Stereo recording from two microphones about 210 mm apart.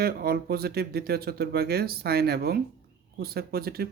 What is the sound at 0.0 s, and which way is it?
Speech, 45° right (ahead or behind).